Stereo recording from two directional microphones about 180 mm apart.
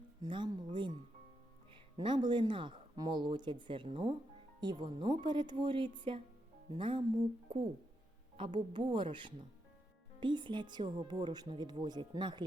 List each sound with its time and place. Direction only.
0.2 s speech: 25° right (ahead or behind)
2.0 s speech: 25° right (ahead or behind)
8.4 s a woman's voice: 40° right (ahead or behind)
8.8 s speech: 25° right (ahead or behind)
10.2 s speech: 25° right (ahead or behind)